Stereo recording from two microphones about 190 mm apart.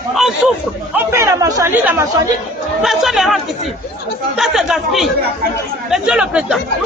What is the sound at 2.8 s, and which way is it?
A man's voice, centre (ahead or behind).